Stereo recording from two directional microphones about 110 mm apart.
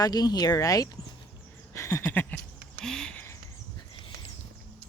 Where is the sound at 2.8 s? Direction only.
5° left (ahead or behind).